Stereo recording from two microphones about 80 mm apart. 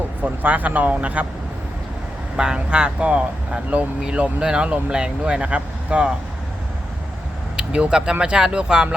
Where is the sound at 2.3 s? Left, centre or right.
Centre.